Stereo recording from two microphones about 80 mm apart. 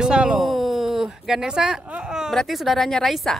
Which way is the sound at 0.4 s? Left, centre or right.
Centre.